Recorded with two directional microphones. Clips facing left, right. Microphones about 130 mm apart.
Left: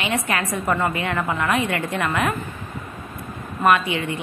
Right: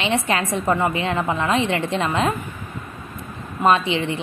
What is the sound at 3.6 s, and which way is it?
Speech, 25° right (ahead or behind).